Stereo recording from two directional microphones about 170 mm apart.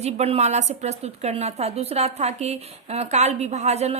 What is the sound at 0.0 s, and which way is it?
A woman's voice, 40° right (ahead or behind).